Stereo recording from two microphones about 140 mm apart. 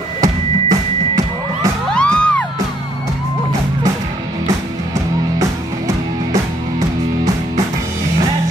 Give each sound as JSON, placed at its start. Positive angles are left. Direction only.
{"t": 0.2, "sound": "music", "side_deg": -25}
{"t": 2.0, "sound": "music", "side_deg": 10}